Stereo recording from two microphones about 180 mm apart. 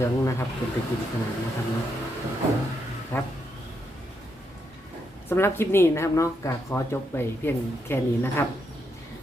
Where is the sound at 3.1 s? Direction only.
15° left (ahead or behind).